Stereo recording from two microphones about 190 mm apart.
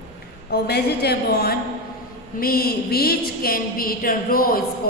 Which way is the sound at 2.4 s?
50° left (ahead or behind).